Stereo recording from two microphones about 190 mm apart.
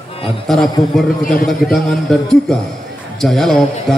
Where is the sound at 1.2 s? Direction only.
45° left (ahead or behind).